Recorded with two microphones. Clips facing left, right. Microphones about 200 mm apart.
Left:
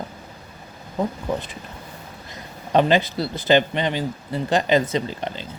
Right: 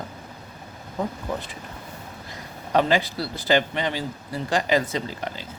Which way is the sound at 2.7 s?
20° left (ahead or behind).